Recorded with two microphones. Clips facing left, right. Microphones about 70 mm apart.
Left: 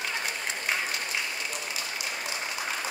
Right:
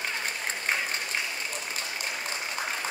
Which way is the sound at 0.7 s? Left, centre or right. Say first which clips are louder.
Right 1 dB; right.